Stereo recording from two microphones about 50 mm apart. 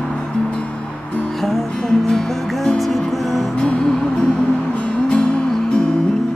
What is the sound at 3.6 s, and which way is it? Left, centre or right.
Music, centre.